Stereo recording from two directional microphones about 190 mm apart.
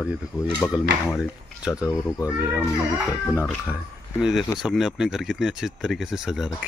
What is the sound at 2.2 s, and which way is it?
Speech, 10° right (ahead or behind).